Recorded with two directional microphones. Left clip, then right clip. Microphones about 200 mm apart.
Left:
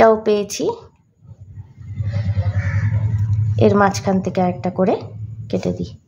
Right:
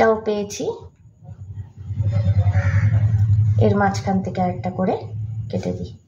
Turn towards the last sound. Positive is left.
turn(degrees=45)  # may be behind; listen again after turning